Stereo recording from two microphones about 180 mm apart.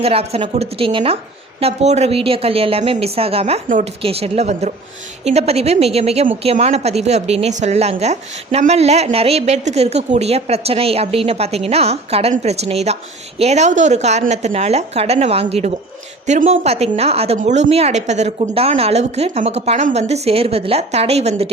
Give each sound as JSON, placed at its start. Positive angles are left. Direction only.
{"t": 0.0, "sound": "a woman's voice", "side_deg": -35}